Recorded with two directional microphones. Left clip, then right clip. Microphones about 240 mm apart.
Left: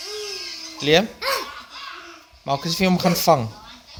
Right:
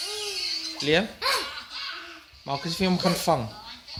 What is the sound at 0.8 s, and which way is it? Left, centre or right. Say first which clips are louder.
Speech: left 7 dB; left.